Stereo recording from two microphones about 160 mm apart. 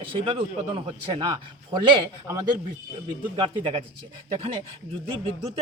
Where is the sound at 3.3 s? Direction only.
30° right (ahead or behind).